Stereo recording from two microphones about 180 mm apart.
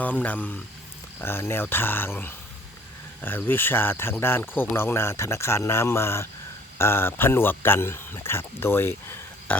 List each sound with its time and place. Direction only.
0.0 s speech: 10° left (ahead or behind)